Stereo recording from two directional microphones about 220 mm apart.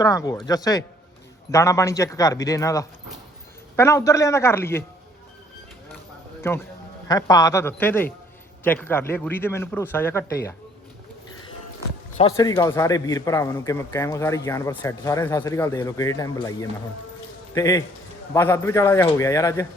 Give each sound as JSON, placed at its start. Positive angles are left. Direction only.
{"t": 0.0, "sound": "a man's voice", "side_deg": 15}
{"t": 6.4, "sound": "a man's voice", "side_deg": 10}
{"t": 12.4, "sound": "a man's voice", "side_deg": 15}